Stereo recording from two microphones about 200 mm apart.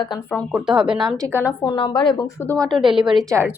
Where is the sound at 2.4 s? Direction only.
5° left (ahead or behind); by 3.6 s 10° right (ahead or behind).